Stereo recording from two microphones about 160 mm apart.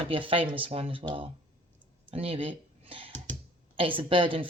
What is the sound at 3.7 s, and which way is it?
Speech, 35° right (ahead or behind).